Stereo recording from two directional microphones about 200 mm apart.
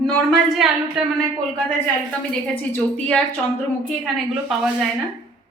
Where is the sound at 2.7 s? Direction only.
5° left (ahead or behind).